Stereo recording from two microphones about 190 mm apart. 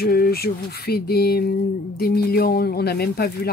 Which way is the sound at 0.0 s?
55° left (ahead or behind).